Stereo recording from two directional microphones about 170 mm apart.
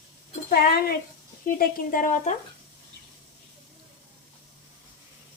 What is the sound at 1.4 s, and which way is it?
Speech, 55° left (ahead or behind).